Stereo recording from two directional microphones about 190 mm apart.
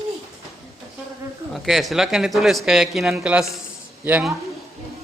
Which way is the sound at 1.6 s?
Centre (ahead or behind).